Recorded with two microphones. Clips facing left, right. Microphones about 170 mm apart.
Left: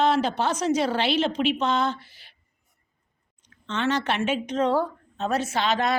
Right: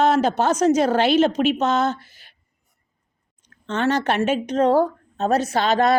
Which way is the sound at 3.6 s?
40° right (ahead or behind).